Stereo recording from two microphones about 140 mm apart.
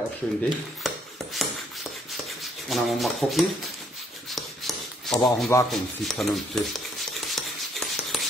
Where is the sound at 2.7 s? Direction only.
Centre (ahead or behind).